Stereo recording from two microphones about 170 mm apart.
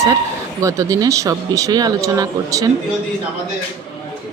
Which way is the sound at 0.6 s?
20° right (ahead or behind).